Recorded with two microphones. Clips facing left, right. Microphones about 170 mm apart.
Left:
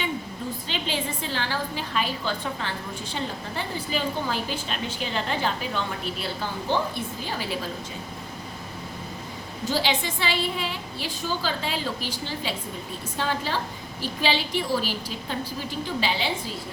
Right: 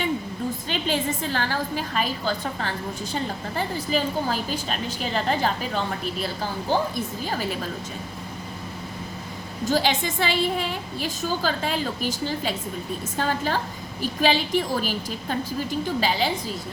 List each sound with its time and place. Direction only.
0.7 s a woman's voice: 45° right (ahead or behind)
9.6 s a woman's voice: 45° right (ahead or behind)